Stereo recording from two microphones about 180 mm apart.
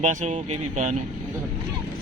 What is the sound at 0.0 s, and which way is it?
Speech, 45° right (ahead or behind).